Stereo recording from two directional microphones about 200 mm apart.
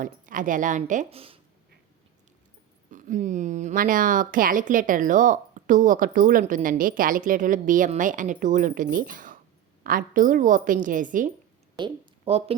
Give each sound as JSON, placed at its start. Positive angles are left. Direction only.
{"t": 0.0, "sound": "speech", "side_deg": -40}
{"t": 2.9, "sound": "speech", "side_deg": -40}
{"t": 11.8, "sound": "speech", "side_deg": -30}